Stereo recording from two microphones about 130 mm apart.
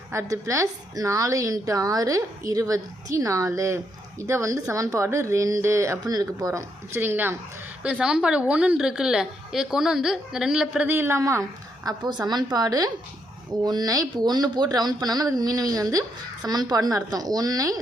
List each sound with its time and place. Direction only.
0.1 s a woman's voice: 25° right (ahead or behind)